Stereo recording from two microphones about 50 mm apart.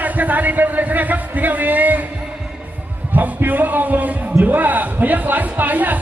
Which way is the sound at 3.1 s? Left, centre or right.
Right.